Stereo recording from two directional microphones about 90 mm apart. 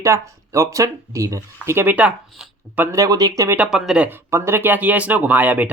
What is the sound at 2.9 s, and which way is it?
Speech, 40° right (ahead or behind).